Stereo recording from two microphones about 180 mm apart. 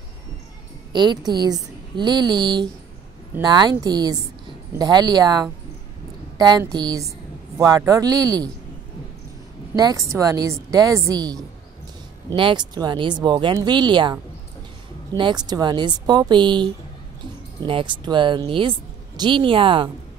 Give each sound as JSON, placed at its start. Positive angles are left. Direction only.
{"t": 0.9, "sound": "a woman's voice", "side_deg": -25}
{"t": 9.8, "sound": "speech", "side_deg": -20}
{"t": 12.4, "sound": "speech", "side_deg": -25}
{"t": 15.1, "sound": "speech", "side_deg": -25}